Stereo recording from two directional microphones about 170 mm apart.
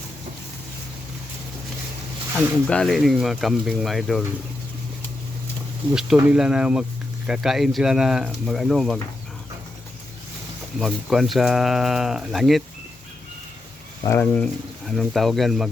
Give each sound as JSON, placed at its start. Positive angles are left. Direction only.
{"t": 2.6, "sound": "speech", "side_deg": 5}
{"t": 5.9, "sound": "speech", "side_deg": -5}
{"t": 10.8, "sound": "speech", "side_deg": 0}
{"t": 14.0, "sound": "speech", "side_deg": 15}